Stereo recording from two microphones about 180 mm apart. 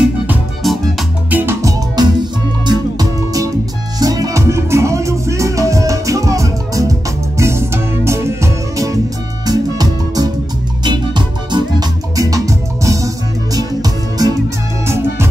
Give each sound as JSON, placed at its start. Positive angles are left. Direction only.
{"t": 0.3, "sound": "music", "side_deg": -5}
{"t": 1.4, "sound": "music", "side_deg": -15}